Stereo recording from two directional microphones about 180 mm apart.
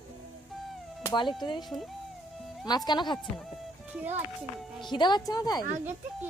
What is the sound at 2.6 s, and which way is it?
Speech, 25° left (ahead or behind).